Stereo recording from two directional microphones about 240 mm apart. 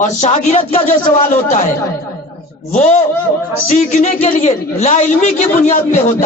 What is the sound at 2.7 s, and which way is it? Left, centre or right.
A man's voice, left.